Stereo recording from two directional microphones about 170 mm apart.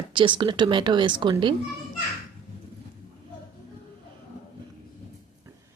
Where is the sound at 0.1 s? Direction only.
30° right (ahead or behind).